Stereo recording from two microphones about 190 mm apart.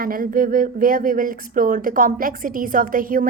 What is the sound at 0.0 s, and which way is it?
Speech, 50° right (ahead or behind).